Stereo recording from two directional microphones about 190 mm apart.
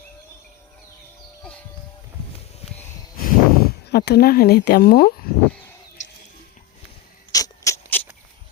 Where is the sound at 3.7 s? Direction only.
60° left (ahead or behind).